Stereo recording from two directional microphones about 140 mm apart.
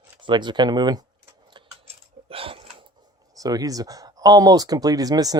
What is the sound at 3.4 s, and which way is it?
Speech, 25° right (ahead or behind).